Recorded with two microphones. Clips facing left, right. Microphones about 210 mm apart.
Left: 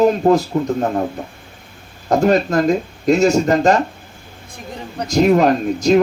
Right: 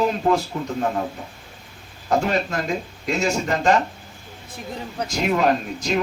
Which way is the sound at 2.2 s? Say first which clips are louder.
Left 9 dB; 40° left (ahead or behind).